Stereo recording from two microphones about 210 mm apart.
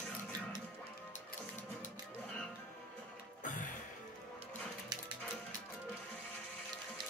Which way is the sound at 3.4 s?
40° left (ahead or behind).